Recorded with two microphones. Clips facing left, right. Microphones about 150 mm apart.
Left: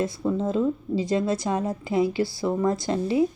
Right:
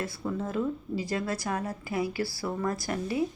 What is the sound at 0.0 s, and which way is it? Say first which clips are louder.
A woman's voice: left 7 dB; 20° left (ahead or behind).